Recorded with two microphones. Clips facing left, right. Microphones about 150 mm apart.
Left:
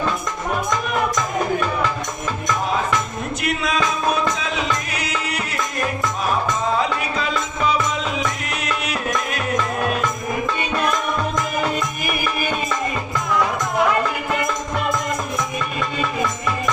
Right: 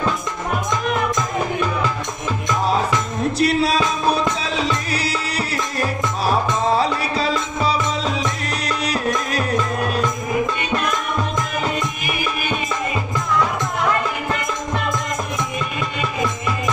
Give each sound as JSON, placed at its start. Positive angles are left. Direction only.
{"t": 3.3, "sound": "music", "side_deg": -35}